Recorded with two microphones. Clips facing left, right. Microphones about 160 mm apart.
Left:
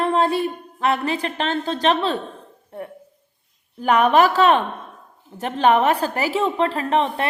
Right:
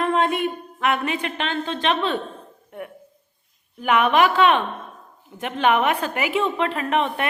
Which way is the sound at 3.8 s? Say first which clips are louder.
Left 2 dB; 40° left (ahead or behind).